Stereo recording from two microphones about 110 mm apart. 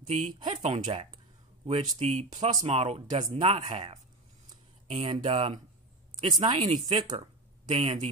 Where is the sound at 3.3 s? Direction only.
55° right (ahead or behind).